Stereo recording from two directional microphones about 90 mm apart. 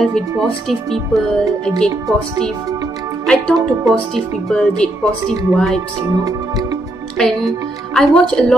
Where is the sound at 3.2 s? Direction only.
10° left (ahead or behind).